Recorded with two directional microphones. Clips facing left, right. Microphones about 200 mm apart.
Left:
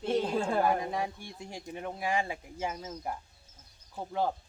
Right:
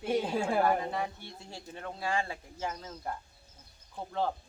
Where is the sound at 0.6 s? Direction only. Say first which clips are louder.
Even; 10° left (ahead or behind).